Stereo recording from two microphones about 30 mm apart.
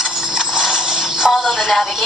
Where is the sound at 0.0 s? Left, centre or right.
Centre.